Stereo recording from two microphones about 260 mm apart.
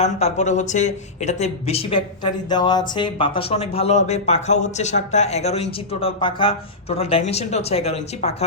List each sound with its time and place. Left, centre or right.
0.0 s speech: left